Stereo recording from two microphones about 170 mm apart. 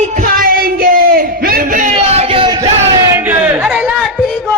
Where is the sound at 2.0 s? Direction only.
35° right (ahead or behind).